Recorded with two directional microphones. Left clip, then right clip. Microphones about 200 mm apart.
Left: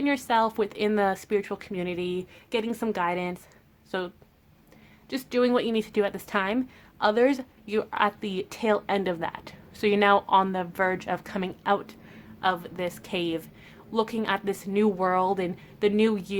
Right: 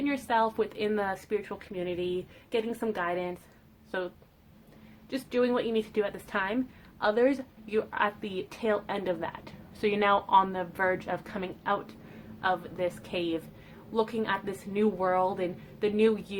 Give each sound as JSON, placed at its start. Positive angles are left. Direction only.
{"t": 0.0, "sound": "a woman's voice", "side_deg": 40}